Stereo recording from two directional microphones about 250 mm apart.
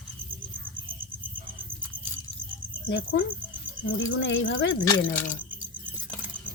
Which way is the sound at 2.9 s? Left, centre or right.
Left.